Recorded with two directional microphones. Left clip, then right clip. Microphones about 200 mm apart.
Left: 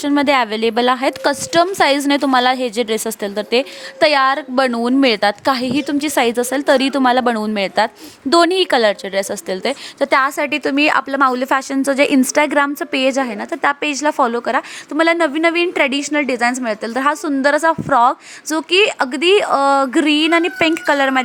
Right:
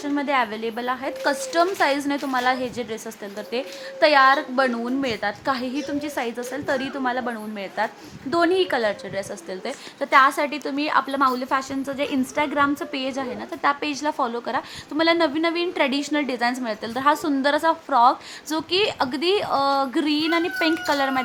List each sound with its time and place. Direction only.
0.0 s a woman's voice: 45° left (ahead or behind)